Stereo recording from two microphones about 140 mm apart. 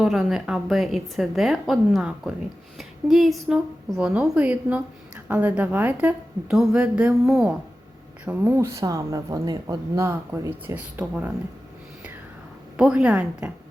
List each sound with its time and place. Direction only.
0.0 s a woman's voice: centre (ahead or behind)
12.7 s a woman's voice: 5° right (ahead or behind)